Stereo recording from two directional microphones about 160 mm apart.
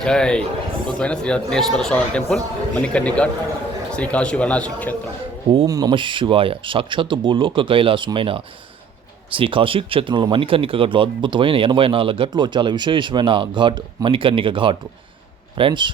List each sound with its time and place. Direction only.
0.0 s speech: 5° left (ahead or behind)
5.6 s speech: 25° right (ahead or behind)